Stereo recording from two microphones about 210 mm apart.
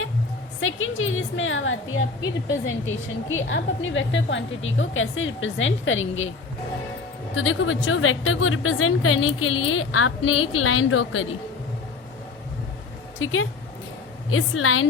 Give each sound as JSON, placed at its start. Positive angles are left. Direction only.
{"t": 0.6, "sound": "a woman's voice", "side_deg": 70}
{"t": 7.3, "sound": "a woman's voice", "side_deg": 70}
{"t": 13.1, "sound": "a woman's voice", "side_deg": 75}